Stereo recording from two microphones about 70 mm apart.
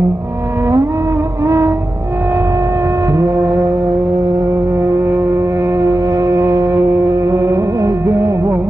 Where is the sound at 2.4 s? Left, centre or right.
Right.